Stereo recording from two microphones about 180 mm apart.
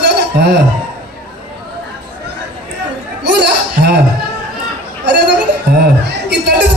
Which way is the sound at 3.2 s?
65° right (ahead or behind).